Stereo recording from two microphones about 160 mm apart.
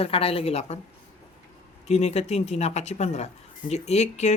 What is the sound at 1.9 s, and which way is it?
Speech, 45° left (ahead or behind).